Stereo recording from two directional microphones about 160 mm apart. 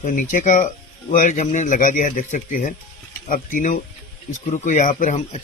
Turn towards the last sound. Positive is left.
turn(degrees=45)  # may be behind; listen again after turning